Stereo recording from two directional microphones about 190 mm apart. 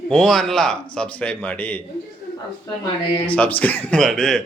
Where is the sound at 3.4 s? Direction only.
10° left (ahead or behind).